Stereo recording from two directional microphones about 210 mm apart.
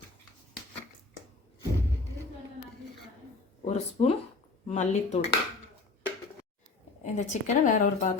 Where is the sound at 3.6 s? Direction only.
30° left (ahead or behind).